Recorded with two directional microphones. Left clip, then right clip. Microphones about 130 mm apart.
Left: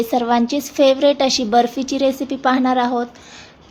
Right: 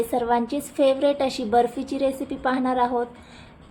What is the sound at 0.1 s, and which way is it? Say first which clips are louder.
A woman's voice: left 5 dB; 30° left (ahead or behind).